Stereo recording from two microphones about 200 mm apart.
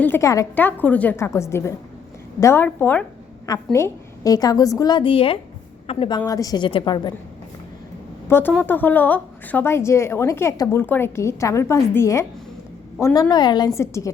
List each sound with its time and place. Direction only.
0.0 s a woman's voice: 15° left (ahead or behind)
8.3 s a woman's voice: 10° left (ahead or behind)